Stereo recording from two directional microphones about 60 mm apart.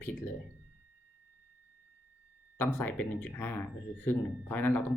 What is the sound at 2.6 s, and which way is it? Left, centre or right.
Speech, left.